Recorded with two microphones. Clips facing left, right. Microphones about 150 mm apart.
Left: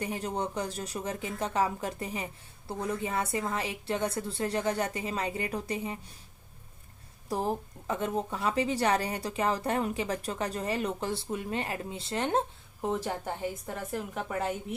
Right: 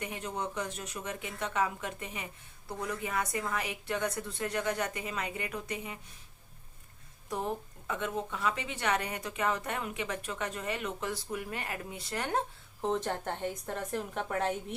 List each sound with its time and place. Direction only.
0.0 s speech: 35° left (ahead or behind)
7.3 s speech: 35° left (ahead or behind)
12.8 s a woman's voice: 5° left (ahead or behind)